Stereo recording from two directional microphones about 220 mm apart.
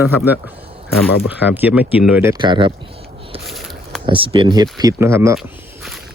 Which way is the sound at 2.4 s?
20° right (ahead or behind).